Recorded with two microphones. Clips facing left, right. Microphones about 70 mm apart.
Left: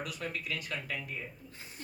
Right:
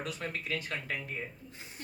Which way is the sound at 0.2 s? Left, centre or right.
Right.